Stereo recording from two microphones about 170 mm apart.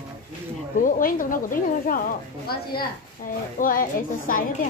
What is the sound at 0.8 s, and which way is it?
Speech, 50° left (ahead or behind).